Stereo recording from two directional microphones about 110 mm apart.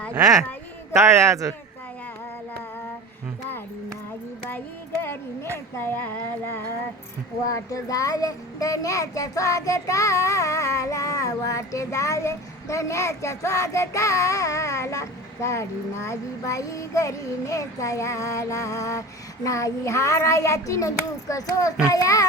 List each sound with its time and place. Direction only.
0.1 s a man's voice: 30° right (ahead or behind)
5.7 s a child's voice: 20° left (ahead or behind)
7.4 s a child's voice: 30° left (ahead or behind)